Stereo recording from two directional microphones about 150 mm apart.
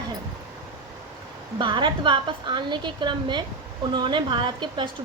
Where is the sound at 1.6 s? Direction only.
30° right (ahead or behind).